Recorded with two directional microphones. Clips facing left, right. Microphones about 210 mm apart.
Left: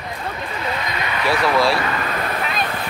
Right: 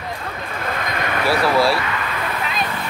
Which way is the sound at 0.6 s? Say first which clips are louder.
Right 2 dB; 50° right (ahead or behind).